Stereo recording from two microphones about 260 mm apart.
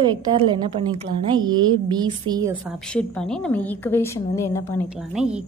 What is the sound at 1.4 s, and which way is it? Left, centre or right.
A woman's voice, centre.